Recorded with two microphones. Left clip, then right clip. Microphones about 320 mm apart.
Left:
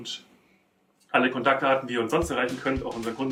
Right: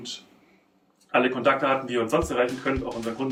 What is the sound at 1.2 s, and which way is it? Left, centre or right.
Speech, centre.